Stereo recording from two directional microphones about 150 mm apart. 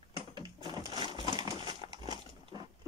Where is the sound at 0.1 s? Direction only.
30° right (ahead or behind).